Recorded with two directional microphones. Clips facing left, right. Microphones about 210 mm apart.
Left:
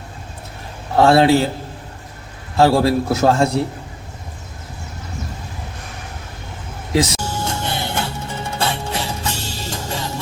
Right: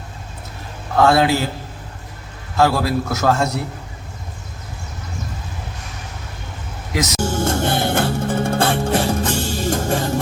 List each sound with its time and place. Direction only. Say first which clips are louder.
0.9 s a man's voice: left 3 dB; 30° left (ahead or behind)
2.6 s a man's voice: left 3 dB; 30° left (ahead or behind)
6.9 s speech: left 4 dB; 30° left (ahead or behind)
7.2 s music: right 6 dB; 50° right (ahead or behind)